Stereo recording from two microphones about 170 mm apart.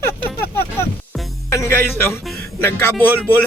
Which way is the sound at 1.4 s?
15° left (ahead or behind).